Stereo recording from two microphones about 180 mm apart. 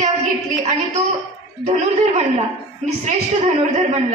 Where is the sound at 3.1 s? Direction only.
40° right (ahead or behind).